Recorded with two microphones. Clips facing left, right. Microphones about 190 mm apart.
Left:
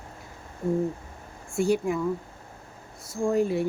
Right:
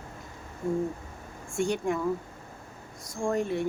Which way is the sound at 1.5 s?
5° left (ahead or behind).